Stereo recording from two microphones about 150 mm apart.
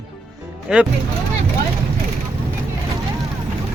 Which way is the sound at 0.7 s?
5° right (ahead or behind).